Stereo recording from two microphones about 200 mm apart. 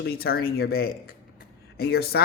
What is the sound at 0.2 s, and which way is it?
Speech, 50° left (ahead or behind).